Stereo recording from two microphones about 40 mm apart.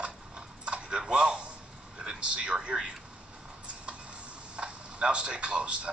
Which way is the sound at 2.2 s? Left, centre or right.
Right.